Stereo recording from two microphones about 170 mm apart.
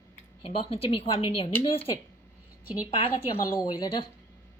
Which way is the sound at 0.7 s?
35° left (ahead or behind).